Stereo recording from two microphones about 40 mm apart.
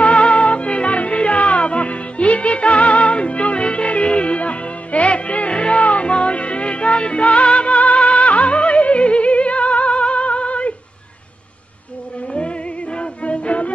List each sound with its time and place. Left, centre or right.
0.0 s music: left
12.3 s music: left